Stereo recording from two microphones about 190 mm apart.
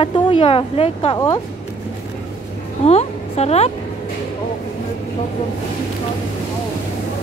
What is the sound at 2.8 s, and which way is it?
Speech, 35° left (ahead or behind).